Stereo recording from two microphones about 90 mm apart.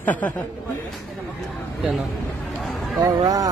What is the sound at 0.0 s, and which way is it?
Speech, 15° left (ahead or behind).